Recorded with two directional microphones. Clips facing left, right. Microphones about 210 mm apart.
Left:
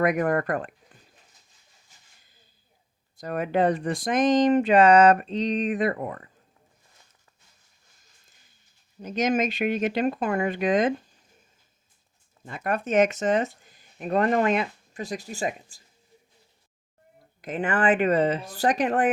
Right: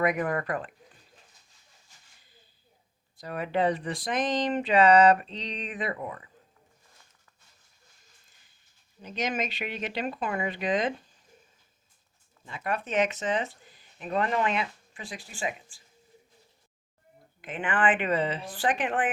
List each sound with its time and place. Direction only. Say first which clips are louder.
0.0 s speech: left 4 dB; 45° left (ahead or behind)
3.2 s speech: left 4 dB; 45° left (ahead or behind)
9.0 s speech: left 7 dB; 45° left (ahead or behind)
12.5 s speech: left 5 dB; 45° left (ahead or behind)
17.4 s speech: left 3 dB; 40° left (ahead or behind)